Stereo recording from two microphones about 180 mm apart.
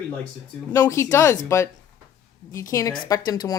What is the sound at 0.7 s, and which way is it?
Speech, 15° left (ahead or behind).